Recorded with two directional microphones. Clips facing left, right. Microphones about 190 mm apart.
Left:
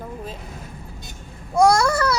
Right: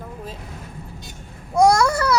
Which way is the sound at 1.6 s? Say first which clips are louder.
Right 1 dB; 15° right (ahead or behind).